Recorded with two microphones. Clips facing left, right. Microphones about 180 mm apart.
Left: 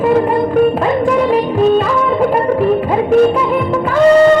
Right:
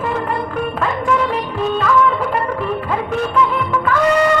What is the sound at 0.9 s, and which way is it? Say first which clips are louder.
Music: left 6 dB; 35° left (ahead or behind).